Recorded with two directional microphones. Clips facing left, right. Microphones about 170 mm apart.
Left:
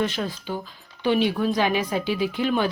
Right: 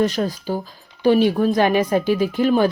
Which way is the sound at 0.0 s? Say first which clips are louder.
Right 6 dB; 40° right (ahead or behind).